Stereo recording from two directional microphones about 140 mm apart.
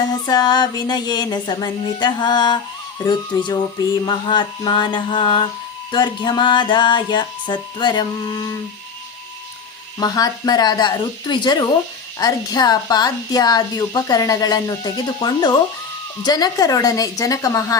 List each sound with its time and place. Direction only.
0.0 s music: 30° left (ahead or behind)
10.0 s music: 25° left (ahead or behind)
12.2 s speech: 30° left (ahead or behind)